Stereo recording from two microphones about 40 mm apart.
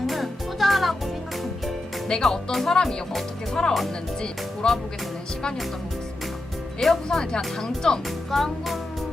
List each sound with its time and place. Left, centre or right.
0.1 s music: centre
2.0 s speech: centre
6.7 s music: centre
7.5 s speech: centre
8.0 s music: centre